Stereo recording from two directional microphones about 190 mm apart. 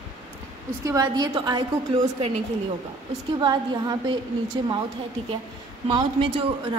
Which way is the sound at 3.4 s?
25° right (ahead or behind).